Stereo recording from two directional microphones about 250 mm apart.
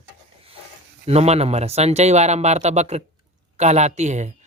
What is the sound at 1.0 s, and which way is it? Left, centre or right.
Speech, right.